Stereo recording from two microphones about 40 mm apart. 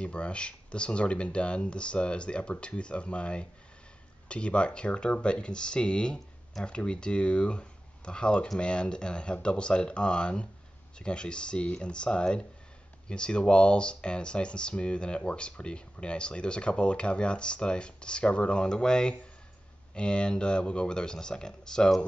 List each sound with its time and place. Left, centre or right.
0.0 s speech: left